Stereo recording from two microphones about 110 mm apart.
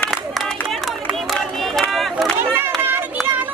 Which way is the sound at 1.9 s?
Centre (ahead or behind).